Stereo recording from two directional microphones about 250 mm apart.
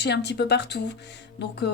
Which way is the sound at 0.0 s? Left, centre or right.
Left.